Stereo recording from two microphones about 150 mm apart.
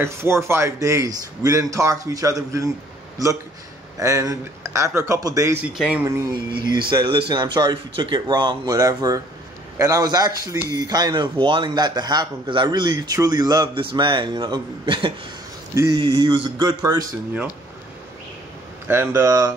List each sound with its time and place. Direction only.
0.0 s a man's voice: 15° right (ahead or behind)
4.0 s a man's voice: 20° right (ahead or behind)
5.8 s speech: 10° right (ahead or behind)
6.0 s a man's voice: 30° right (ahead or behind)
15.7 s a man's voice: 20° right (ahead or behind)
16.0 s speech: 35° right (ahead or behind)
18.9 s speech: 15° right (ahead or behind)